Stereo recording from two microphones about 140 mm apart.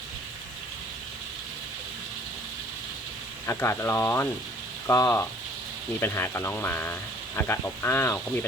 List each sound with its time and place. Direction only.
3.4 s speech: 20° left (ahead or behind)